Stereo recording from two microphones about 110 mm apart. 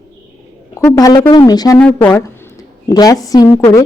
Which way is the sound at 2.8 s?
35° left (ahead or behind).